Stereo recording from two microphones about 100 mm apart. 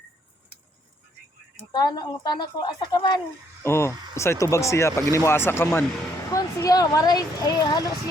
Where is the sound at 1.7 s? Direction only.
45° left (ahead or behind).